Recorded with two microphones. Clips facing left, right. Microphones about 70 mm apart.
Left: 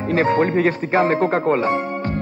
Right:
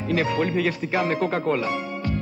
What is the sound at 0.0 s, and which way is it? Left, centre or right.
Speech, left.